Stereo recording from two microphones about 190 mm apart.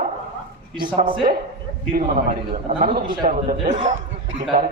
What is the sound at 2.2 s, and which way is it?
A man's voice, 35° right (ahead or behind).